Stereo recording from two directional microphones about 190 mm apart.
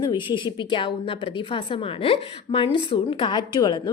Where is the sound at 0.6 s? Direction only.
25° left (ahead or behind).